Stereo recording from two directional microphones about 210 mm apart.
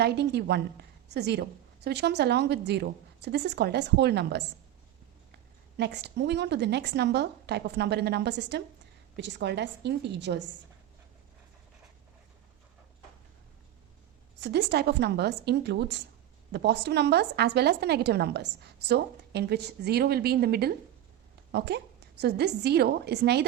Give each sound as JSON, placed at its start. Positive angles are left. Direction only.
{"t": 0.0, "sound": "a woman's voice", "side_deg": -50}
{"t": 5.7, "sound": "a woman's voice", "side_deg": -55}
{"t": 14.4, "sound": "a woman's voice", "side_deg": -55}